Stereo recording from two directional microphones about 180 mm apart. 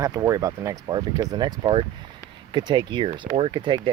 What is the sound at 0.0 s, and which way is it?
Speech, 15° right (ahead or behind).